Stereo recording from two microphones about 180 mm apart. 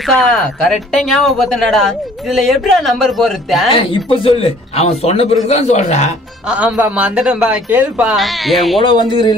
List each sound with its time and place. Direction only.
0.0 s speech: centre (ahead or behind)
3.7 s a man's voice: 30° left (ahead or behind)
6.4 s speech: 5° right (ahead or behind)
8.8 s speech: 25° left (ahead or behind)